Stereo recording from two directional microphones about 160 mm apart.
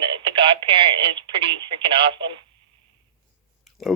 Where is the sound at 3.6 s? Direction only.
Centre (ahead or behind).